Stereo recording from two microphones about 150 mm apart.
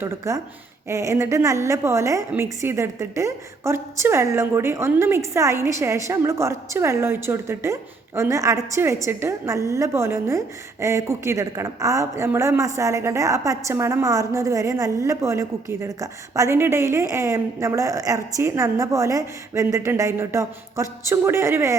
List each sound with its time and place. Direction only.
0.3 s a woman's voice: 20° right (ahead or behind)